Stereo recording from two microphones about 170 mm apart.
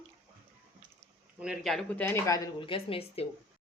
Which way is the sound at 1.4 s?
Centre (ahead or behind).